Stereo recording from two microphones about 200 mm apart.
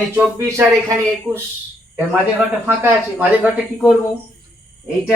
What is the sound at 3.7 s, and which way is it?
Speech, 5° left (ahead or behind).